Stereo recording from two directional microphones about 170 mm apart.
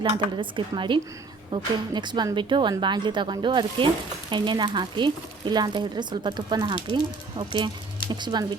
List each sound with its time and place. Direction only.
0.0 s speech: 30° right (ahead or behind)